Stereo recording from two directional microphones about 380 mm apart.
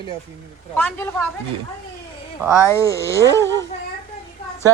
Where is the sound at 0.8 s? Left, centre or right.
Centre.